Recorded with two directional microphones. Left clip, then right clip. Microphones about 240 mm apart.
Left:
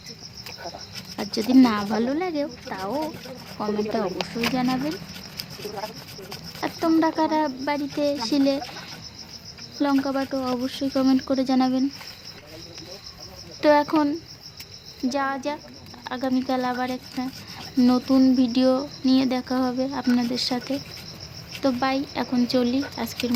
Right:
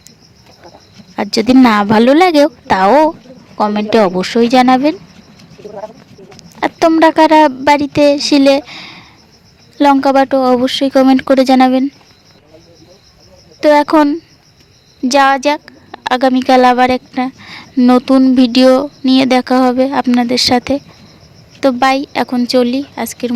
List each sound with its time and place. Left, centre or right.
1.1 s a woman's voice: right
6.6 s a woman's voice: right
13.6 s a woman's voice: right